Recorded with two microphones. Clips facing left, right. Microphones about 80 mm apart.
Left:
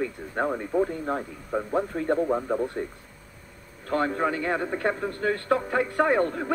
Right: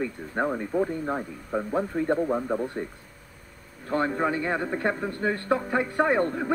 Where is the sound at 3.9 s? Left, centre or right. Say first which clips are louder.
Even; right.